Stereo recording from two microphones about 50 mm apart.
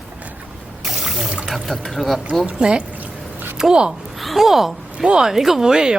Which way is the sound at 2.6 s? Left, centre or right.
Centre.